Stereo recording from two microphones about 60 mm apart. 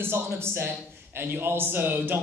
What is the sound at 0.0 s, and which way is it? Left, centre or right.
A man's voice, right.